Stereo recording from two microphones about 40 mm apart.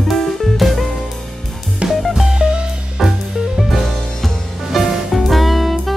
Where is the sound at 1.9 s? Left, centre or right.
Centre.